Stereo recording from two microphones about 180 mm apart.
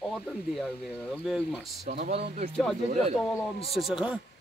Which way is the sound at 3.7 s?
5° right (ahead or behind).